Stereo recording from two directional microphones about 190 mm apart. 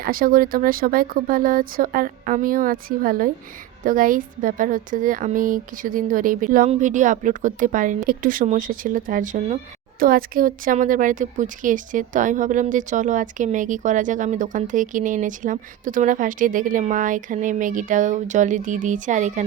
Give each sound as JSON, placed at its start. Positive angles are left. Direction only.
{"t": 0.0, "sound": "speech", "side_deg": -50}